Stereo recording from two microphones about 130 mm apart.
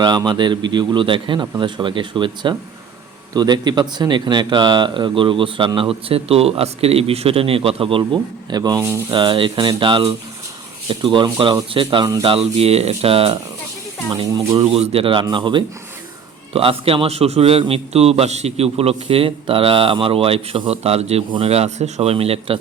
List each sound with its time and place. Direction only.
0.0 s a man's voice: 35° right (ahead or behind)
14.1 s speech: 30° right (ahead or behind)
14.6 s a man's voice: 45° right (ahead or behind)